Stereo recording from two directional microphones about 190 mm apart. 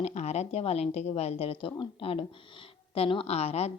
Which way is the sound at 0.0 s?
35° left (ahead or behind).